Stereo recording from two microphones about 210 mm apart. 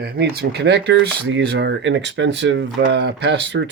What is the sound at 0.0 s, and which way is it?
Speech, 50° right (ahead or behind).